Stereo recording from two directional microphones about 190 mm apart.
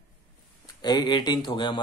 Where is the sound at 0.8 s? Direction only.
20° left (ahead or behind).